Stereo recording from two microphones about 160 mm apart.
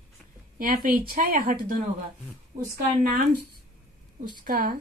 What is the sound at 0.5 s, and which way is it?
Speech, 65° right (ahead or behind).